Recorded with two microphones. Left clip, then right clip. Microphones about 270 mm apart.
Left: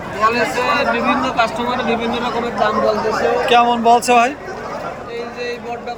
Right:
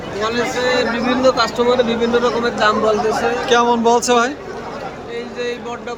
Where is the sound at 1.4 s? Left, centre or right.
Right.